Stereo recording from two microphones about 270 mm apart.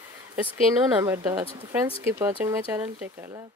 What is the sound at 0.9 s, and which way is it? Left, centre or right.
Speech, centre.